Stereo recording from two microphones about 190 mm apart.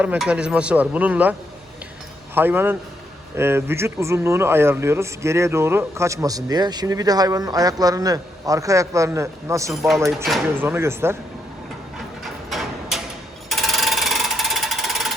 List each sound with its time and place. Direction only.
0.0 s speech: 5° right (ahead or behind)
12.2 s a sound: centre (ahead or behind)
13.5 s mechanisms: centre (ahead or behind)